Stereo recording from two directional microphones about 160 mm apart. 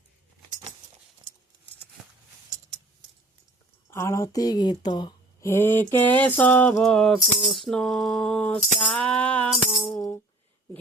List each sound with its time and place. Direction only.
3.8 s speech: 15° left (ahead or behind)
5.5 s mantra: 15° left (ahead or behind)
6.8 s tambourine: centre (ahead or behind)